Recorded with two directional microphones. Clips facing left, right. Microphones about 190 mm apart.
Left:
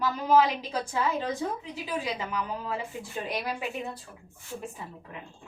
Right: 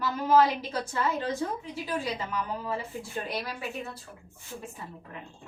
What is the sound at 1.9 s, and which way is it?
Speech, 15° left (ahead or behind).